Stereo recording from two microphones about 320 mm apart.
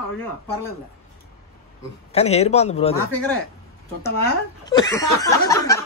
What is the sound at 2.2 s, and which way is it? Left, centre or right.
Speech, centre.